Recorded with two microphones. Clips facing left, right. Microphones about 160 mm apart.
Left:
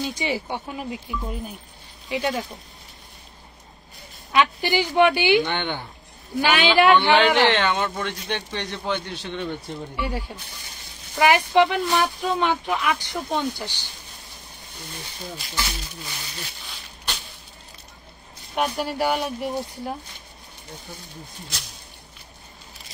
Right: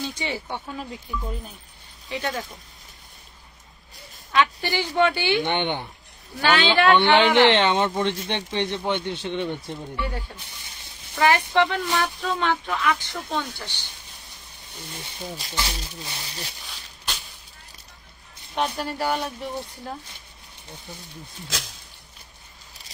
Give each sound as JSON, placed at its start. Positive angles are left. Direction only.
{"t": 0.0, "sound": "speech", "side_deg": 10}
{"t": 2.0, "sound": "speech", "side_deg": 20}
{"t": 4.3, "sound": "speech", "side_deg": 15}
{"t": 5.4, "sound": "speech", "side_deg": -20}
{"t": 6.4, "sound": "speech", "side_deg": 15}
{"t": 6.9, "sound": "speech", "side_deg": -25}
{"t": 9.9, "sound": "speech", "side_deg": 10}
{"t": 15.4, "sound": "speech", "side_deg": -30}
{"t": 18.5, "sound": "speech", "side_deg": 10}
{"t": 21.5, "sound": "speech", "side_deg": -90}